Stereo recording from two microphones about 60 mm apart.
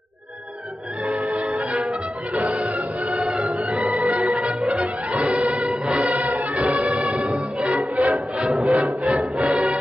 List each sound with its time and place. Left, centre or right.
1.5 s music: centre
4.2 s music: centre
4.6 s music: centre
6.5 s music: right; by 8.5 s centre
8.7 s music: centre